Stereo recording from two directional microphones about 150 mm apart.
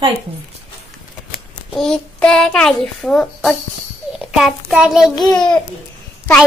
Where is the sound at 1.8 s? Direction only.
5° left (ahead or behind).